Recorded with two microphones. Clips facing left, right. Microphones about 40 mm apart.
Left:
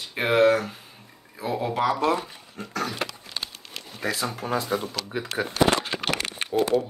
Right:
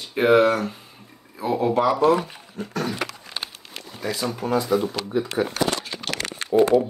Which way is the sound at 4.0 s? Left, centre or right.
Left.